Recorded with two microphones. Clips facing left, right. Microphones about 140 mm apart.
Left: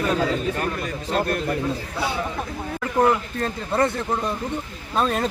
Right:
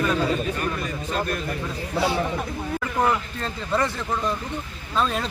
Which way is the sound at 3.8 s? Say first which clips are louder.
Left 5 dB; 55° left (ahead or behind).